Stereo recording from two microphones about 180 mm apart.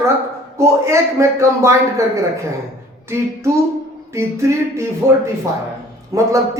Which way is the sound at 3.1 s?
15° right (ahead or behind).